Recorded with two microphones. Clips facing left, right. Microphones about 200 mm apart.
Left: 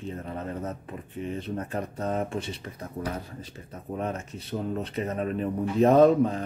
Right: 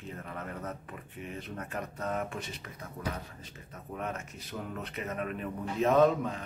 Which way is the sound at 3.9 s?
30° left (ahead or behind).